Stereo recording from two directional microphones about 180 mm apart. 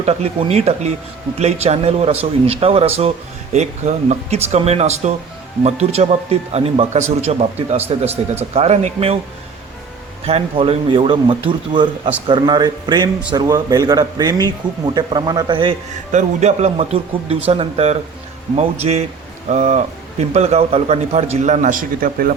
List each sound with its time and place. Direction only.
0.0 s a man's voice: 35° right (ahead or behind)
10.2 s speech: 35° right (ahead or behind)
16.1 s a man's voice: 40° right (ahead or behind)